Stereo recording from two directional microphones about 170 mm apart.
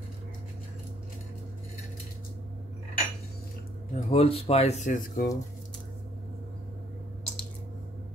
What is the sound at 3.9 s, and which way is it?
Speech, 35° left (ahead or behind).